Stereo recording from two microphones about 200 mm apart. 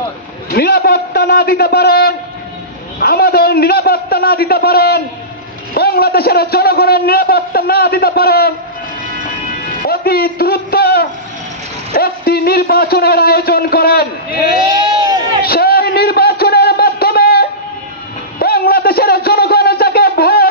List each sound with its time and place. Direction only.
0.5 s a man's voice: 50° left (ahead or behind)
9.8 s a man's voice: 50° left (ahead or behind)
15.4 s a sound: 50° left (ahead or behind)